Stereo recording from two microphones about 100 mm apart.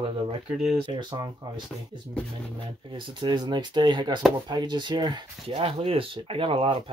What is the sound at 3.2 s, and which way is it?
Speech, 50° right (ahead or behind).